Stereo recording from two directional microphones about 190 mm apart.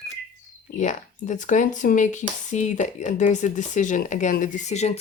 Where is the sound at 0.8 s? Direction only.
40° left (ahead or behind).